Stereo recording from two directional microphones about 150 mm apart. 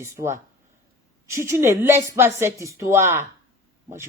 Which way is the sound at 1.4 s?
15° right (ahead or behind).